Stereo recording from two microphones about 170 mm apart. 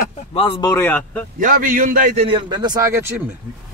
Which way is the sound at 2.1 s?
30° right (ahead or behind).